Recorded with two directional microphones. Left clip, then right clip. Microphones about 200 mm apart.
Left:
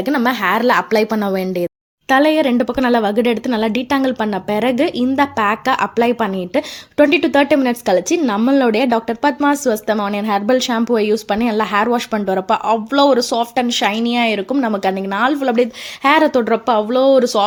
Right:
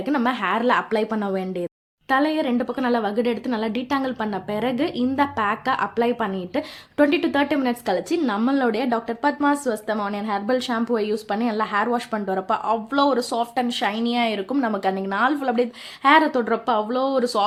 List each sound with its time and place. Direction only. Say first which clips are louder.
0.0 s a woman's voice: left 6 dB; 30° left (ahead or behind)